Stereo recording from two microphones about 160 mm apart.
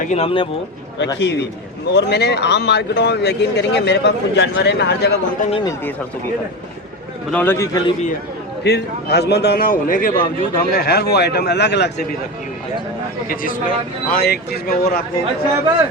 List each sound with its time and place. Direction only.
0.0 s speech: 40° left (ahead or behind)
1.2 s speech: 90° left
7.3 s a man's voice: 10° left (ahead or behind)
8.6 s speech: 90° left
13.2 s speech: 60° left (ahead or behind)